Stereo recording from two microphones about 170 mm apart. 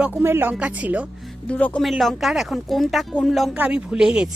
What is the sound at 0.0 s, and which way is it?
Speech, 10° right (ahead or behind).